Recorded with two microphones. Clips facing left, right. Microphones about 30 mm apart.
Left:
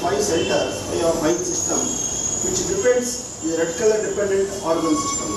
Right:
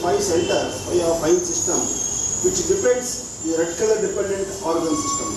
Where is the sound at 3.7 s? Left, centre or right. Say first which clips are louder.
Left 1 dB; centre.